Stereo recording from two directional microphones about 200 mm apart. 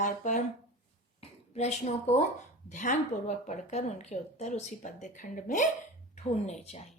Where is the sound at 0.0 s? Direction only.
40° left (ahead or behind).